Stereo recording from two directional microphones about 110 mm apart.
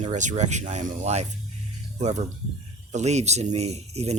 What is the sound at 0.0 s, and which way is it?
Speech, 90° right.